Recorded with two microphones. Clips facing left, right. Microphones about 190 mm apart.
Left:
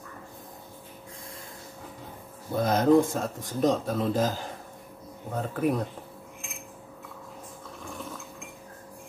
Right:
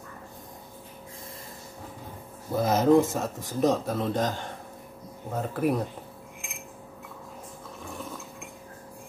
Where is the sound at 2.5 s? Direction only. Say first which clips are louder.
Even; 5° right (ahead or behind).